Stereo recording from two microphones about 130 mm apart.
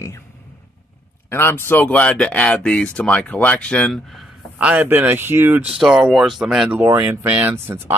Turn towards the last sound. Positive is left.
turn(degrees=-20)  # may be behind; listen again after turning